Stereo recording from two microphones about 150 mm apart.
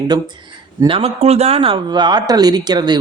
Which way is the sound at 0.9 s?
40° right (ahead or behind).